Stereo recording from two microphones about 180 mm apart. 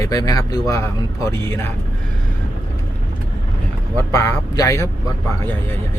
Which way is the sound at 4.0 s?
15° left (ahead or behind).